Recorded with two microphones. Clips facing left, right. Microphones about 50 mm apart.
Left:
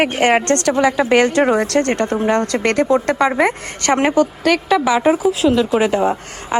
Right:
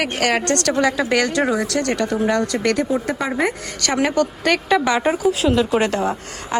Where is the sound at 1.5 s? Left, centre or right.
Left.